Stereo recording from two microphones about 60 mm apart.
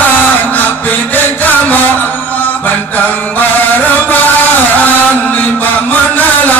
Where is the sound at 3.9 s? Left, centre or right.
Left.